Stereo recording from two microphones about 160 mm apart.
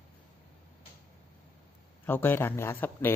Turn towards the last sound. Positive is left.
turn(degrees=15)  # may be behind; listen again after turning